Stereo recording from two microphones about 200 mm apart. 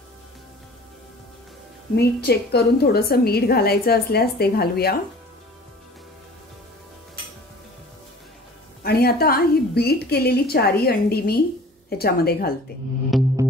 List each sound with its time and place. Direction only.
2.0 s a woman's voice: 55° left (ahead or behind)
8.8 s a woman's voice: 50° left (ahead or behind)
13.1 s music: centre (ahead or behind)